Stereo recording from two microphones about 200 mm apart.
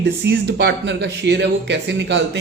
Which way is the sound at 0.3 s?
55° right (ahead or behind).